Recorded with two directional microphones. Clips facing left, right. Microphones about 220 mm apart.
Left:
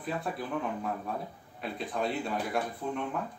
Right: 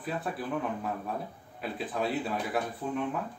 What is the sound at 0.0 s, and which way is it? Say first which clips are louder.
Speech: even; centre (ahead or behind).